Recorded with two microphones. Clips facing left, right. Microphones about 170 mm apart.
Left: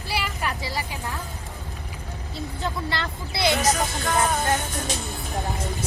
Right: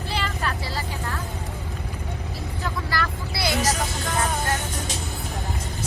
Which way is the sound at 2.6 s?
25° left (ahead or behind).